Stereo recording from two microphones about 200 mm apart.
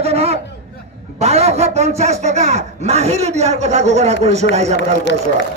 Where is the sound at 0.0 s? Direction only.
30° right (ahead or behind).